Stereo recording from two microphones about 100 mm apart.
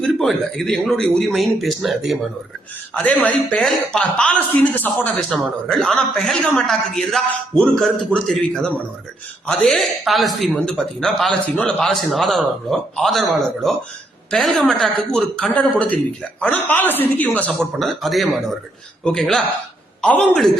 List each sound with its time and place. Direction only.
0.0 s a man's voice: 5° left (ahead or behind)
2.9 s a woman's voice: 15° left (ahead or behind)
5.6 s a man's voice: 5° left (ahead or behind)
17.7 s a man's voice: centre (ahead or behind)